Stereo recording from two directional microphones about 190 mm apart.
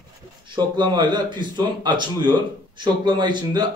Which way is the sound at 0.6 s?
20° right (ahead or behind).